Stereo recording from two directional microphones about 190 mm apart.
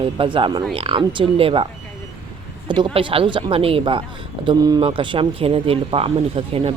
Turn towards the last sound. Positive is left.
turn(degrees=-30)  # may be behind; listen again after turning